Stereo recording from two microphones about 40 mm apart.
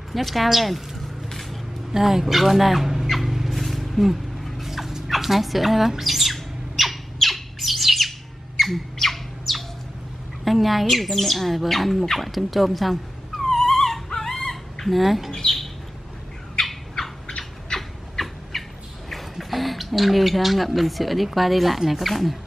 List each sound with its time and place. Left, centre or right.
0.1 s a woman's voice: centre
1.9 s a woman's voice: centre
3.1 s a sound: centre
8.5 s squawk: centre
8.9 s bird: centre
10.4 s speech: centre
14.5 s a sound: centre
15.3 s bird: centre
16.5 s squawk: centre
17.7 s a sound: centre
19.3 s speech: centre